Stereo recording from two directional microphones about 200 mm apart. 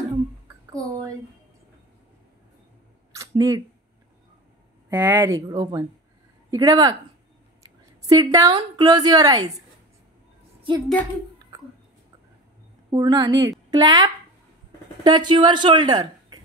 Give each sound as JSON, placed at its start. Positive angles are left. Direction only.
{"t": 3.2, "sound": "a sound", "side_deg": -20}
{"t": 4.8, "sound": "a woman's voice", "side_deg": -10}
{"t": 12.9, "sound": "a woman's voice", "side_deg": -20}